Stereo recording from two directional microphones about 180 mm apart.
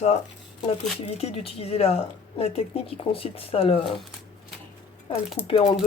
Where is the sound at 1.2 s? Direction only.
35° left (ahead or behind).